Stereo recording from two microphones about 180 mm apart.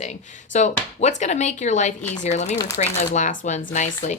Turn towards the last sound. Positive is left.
turn(degrees=40)  # may be behind; listen again after turning